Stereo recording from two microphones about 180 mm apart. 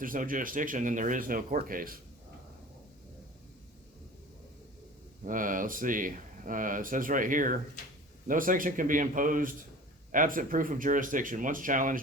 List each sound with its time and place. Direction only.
0.0 s speech: 50° right (ahead or behind)
5.2 s speech: 50° right (ahead or behind)